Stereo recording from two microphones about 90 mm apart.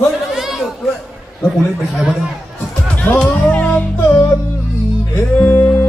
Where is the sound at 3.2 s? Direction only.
15° left (ahead or behind).